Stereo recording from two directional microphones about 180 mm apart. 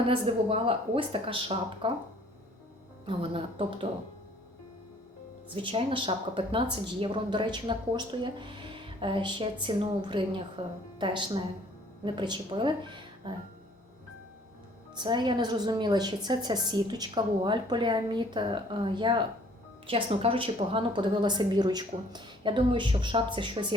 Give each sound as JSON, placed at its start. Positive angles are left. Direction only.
{"t": 0.1, "sound": "speech", "side_deg": -30}
{"t": 3.1, "sound": "speech", "side_deg": -30}
{"t": 5.6, "sound": "speech", "side_deg": -25}
{"t": 14.9, "sound": "speech", "side_deg": -25}